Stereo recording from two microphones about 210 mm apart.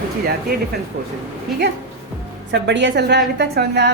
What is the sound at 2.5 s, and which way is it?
A woman's voice, 60° right (ahead or behind).